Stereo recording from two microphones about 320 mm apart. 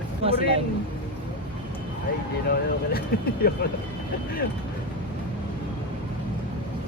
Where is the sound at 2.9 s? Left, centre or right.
Left.